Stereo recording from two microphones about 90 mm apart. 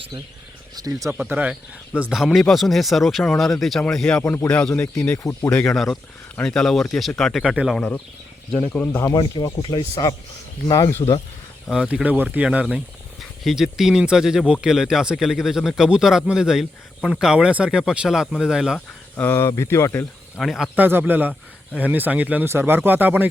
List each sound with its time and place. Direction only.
0.8 s speech: 40° right (ahead or behind)
1.1 s speech: 15° right (ahead or behind); by 5.1 s 15° left (ahead or behind)
5.1 s speech: 35° left (ahead or behind)
5.5 s speech: 10° left (ahead or behind)
7.4 s speech: 10° right (ahead or behind)
7.8 s speech: 15° left (ahead or behind)
9.1 s speech: 45° left (ahead or behind)
10.7 s speech: 35° left (ahead or behind)
11.7 s speech: 5° right (ahead or behind)
12.0 s speech: 20° right (ahead or behind)
13.4 s speech: 5° right (ahead or behind)
19.1 s speech: 30° left (ahead or behind)
20.4 s speech: centre (ahead or behind)
20.7 s speech: 20° right (ahead or behind)